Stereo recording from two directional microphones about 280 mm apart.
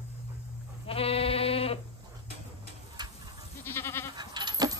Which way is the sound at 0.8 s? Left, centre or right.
Left.